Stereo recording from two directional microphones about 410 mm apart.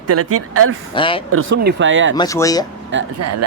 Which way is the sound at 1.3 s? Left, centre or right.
Right.